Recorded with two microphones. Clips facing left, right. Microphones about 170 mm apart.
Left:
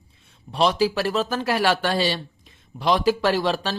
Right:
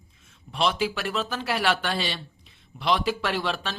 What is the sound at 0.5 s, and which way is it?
Speech, 40° left (ahead or behind).